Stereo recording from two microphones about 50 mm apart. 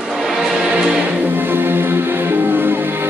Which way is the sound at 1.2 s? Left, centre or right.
Right.